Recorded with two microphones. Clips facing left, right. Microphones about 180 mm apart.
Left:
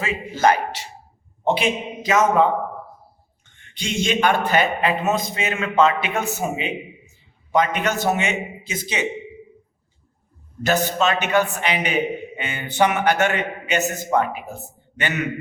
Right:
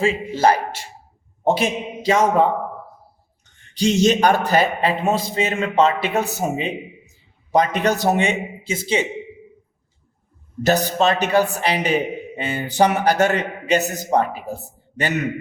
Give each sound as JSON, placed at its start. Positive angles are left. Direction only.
{"t": 0.0, "sound": "speech", "side_deg": -30}
{"t": 1.5, "sound": "a man's voice", "side_deg": -40}
{"t": 10.6, "sound": "a man's voice", "side_deg": -40}